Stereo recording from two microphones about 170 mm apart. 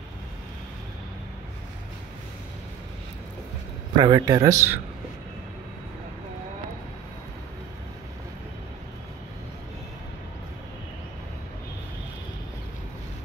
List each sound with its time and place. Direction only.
3.9 s speech: 25° right (ahead or behind)